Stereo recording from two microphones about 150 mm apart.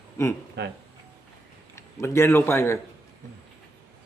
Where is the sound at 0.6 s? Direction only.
90° right.